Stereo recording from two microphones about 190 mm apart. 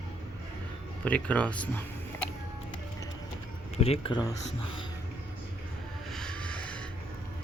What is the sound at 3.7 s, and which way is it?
Speech, 30° left (ahead or behind).